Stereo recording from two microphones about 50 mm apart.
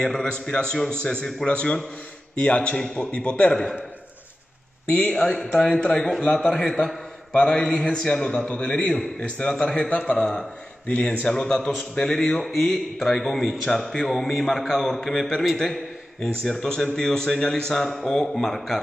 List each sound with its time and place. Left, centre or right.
0.0 s a man's voice: centre
5.0 s a man's voice: centre
11.2 s a man's voice: centre